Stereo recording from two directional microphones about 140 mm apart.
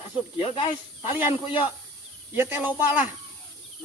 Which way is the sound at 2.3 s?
15° right (ahead or behind).